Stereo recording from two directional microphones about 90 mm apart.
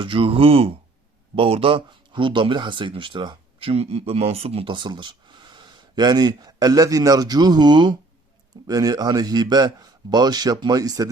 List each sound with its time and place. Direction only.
0.0 s speech: 80° right; by 7.9 s 55° right (ahead or behind)
8.6 s a man's voice: 45° right (ahead or behind)